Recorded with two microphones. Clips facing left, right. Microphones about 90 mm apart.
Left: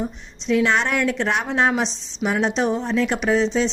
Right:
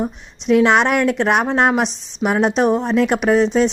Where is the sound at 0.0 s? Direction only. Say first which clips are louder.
Right 4 dB; 55° right (ahead or behind).